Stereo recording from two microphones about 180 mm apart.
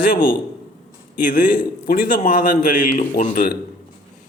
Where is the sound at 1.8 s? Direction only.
50° left (ahead or behind).